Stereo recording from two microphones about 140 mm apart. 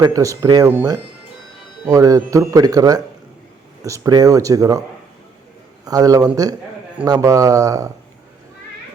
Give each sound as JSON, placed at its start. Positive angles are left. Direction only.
{"t": 0.0, "sound": "speech", "side_deg": -25}
{"t": 1.9, "sound": "speech", "side_deg": -25}
{"t": 5.8, "sound": "speech", "side_deg": -25}